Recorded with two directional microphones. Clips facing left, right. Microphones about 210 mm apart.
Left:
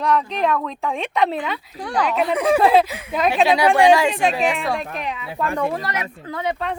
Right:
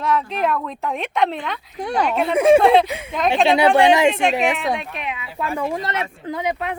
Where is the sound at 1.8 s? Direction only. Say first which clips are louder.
Right 1 dB; 25° right (ahead or behind).